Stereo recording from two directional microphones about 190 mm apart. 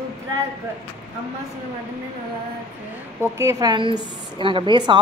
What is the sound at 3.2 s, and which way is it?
A woman's voice, 15° right (ahead or behind).